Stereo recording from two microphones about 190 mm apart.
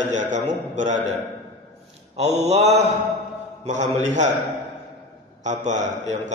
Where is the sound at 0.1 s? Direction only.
40° right (ahead or behind).